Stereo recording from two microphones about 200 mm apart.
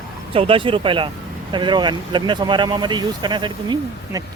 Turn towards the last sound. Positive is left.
turn(degrees=-20)  # may be behind; listen again after turning